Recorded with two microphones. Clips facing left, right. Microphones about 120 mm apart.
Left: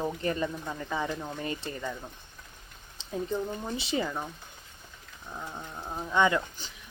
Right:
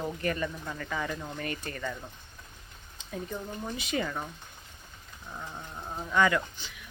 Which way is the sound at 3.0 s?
30° left (ahead or behind).